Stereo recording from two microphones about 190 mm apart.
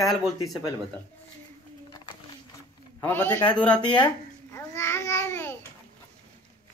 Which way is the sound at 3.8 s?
25° left (ahead or behind).